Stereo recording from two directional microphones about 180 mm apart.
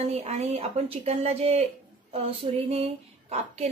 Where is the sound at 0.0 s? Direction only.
35° right (ahead or behind).